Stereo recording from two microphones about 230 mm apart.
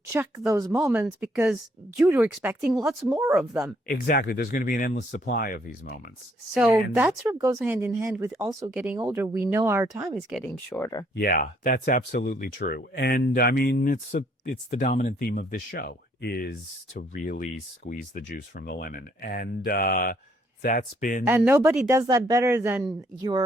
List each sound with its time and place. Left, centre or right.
0.1 s speech: centre
3.8 s speech: left
6.5 s speech: centre
10.7 s speech: centre
11.1 s speech: left
21.2 s speech: centre